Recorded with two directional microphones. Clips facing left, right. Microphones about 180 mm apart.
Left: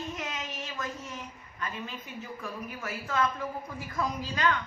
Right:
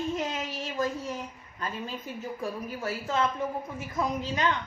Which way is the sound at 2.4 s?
30° right (ahead or behind).